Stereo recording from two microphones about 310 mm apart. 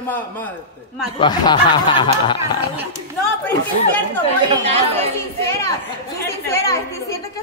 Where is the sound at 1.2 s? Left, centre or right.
Centre.